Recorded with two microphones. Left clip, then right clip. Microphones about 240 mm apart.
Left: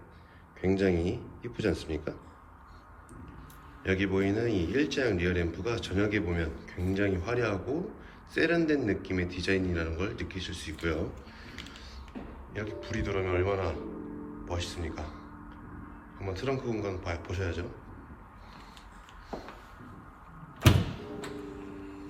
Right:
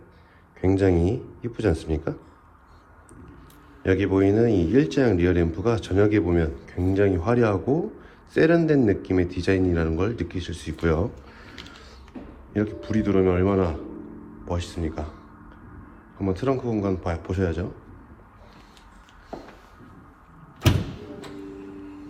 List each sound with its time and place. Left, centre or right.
0.6 s a man's voice: centre
3.8 s a man's voice: centre
11.4 s a sound: centre
12.5 s a man's voice: centre
16.1 s a man's voice: centre
19.3 s a sound: centre